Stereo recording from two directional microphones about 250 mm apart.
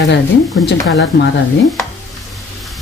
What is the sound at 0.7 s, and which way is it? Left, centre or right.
Speech, left.